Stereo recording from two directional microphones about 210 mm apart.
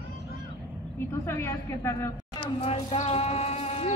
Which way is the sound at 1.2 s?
10° left (ahead or behind).